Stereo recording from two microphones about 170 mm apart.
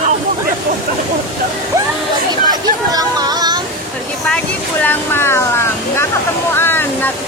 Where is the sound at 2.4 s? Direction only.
25° right (ahead or behind).